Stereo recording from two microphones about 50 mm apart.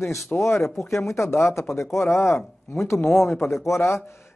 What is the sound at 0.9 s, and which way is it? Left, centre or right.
Speech, left.